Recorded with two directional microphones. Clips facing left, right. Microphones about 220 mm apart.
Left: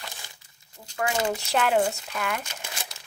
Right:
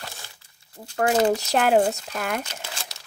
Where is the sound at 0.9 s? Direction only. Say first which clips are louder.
Right 7 dB; 45° right (ahead or behind).